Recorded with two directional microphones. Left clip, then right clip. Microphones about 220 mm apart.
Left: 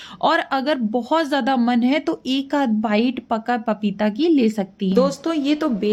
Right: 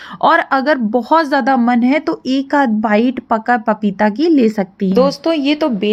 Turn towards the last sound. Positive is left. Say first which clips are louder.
# right 5 dB
turn(degrees=-15)  # may be behind; listen again after turning